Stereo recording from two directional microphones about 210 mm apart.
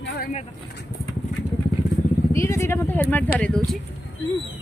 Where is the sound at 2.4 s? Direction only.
15° left (ahead or behind).